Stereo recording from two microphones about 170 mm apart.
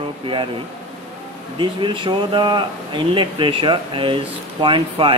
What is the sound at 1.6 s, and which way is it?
Speech, 30° right (ahead or behind).